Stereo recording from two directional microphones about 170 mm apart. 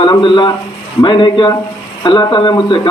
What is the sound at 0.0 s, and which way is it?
A man's voice, 30° left (ahead or behind).